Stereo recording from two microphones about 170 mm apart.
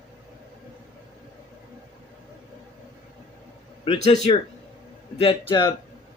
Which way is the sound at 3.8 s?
40° left (ahead or behind).